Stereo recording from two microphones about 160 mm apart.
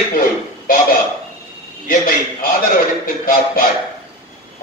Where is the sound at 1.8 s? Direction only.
65° left (ahead or behind).